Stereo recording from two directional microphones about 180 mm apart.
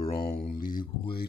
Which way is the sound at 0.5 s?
50° left (ahead or behind).